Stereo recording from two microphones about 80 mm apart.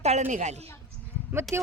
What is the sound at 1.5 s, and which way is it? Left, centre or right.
Speech, right.